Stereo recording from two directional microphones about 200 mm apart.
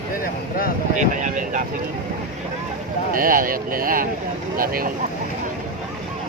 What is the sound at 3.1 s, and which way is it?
Speech, 45° right (ahead or behind).